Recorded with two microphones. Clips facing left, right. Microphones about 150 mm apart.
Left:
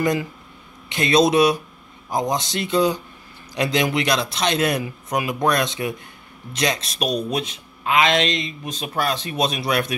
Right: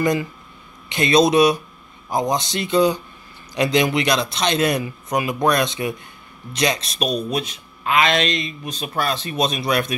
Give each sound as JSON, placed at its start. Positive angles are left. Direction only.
{"t": 0.0, "sound": "a man's voice", "side_deg": 5}